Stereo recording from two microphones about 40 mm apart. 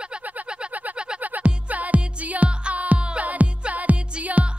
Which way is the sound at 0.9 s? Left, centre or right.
Right.